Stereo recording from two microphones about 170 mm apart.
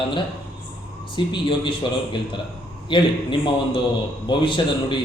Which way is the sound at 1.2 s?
25° left (ahead or behind).